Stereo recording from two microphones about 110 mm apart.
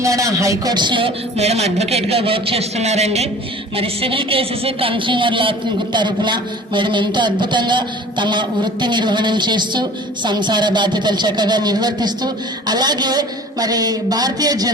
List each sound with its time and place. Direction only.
0.0 s speech: 30° right (ahead or behind); by 1.1 s 45° right (ahead or behind)
1.4 s a man's voice: 75° right (ahead or behind)
3.8 s speech: 55° right (ahead or behind); by 14.7 s 35° right (ahead or behind)